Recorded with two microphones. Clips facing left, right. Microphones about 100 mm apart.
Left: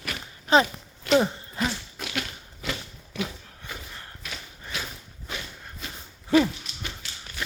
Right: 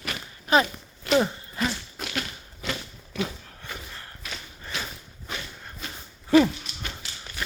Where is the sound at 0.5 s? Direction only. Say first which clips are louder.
Left 1 dB; 25° left (ahead or behind).